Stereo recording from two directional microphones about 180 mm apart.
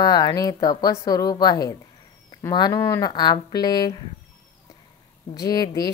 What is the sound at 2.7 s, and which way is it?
Speech, 15° left (ahead or behind).